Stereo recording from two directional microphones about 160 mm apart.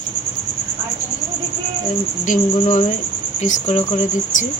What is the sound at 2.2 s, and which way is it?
Speech, 50° left (ahead or behind).